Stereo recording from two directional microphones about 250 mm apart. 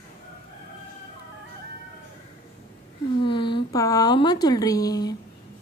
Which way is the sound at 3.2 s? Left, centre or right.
Centre.